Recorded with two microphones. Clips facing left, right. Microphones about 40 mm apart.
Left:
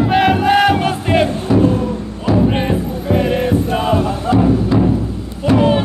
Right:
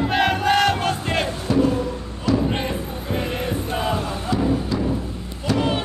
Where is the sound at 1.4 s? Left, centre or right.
Left.